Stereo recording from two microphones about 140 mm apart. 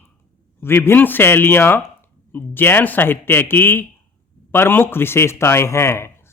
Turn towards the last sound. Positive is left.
turn(degrees=20)  # may be behind; listen again after turning